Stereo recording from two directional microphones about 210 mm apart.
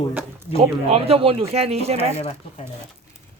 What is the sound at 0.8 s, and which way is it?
Speech, 30° right (ahead or behind).